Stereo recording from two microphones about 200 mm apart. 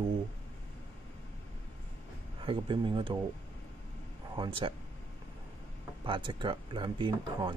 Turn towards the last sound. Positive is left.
turn(degrees=-25)  # may be behind; listen again after turning